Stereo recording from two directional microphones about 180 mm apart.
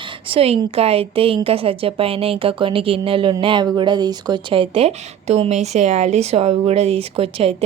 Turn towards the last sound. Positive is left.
turn(degrees=-35)  # may be behind; listen again after turning